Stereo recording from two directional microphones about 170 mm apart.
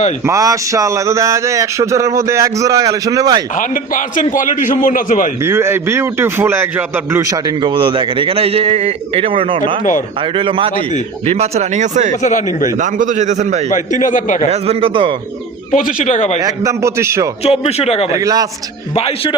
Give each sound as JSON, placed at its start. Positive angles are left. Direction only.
{"t": 0.3, "sound": "speech", "side_deg": -20}
{"t": 3.5, "sound": "a man's voice", "side_deg": 50}
{"t": 5.4, "sound": "a man's voice", "side_deg": -15}
{"t": 12.2, "sound": "a man's voice", "side_deg": 45}
{"t": 12.7, "sound": "a man's voice", "side_deg": -50}
{"t": 13.7, "sound": "a man's voice", "side_deg": 50}
{"t": 14.5, "sound": "speech", "side_deg": -35}
{"t": 15.7, "sound": "a man's voice", "side_deg": 50}
{"t": 16.5, "sound": "a man's voice", "side_deg": -15}
{"t": 17.4, "sound": "speech", "side_deg": 35}
{"t": 18.1, "sound": "speech", "side_deg": -20}
{"t": 18.9, "sound": "speech", "side_deg": 35}